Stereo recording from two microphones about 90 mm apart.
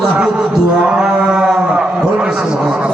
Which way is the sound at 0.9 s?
10° right (ahead or behind).